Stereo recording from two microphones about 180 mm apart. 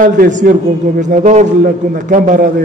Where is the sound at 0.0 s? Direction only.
45° right (ahead or behind).